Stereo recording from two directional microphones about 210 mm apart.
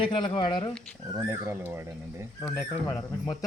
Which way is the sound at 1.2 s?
10° right (ahead or behind).